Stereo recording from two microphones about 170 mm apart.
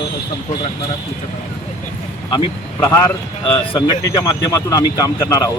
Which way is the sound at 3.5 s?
25° left (ahead or behind).